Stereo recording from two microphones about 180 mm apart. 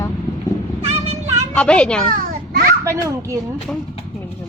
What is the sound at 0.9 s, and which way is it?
Vehicle, 35° right (ahead or behind).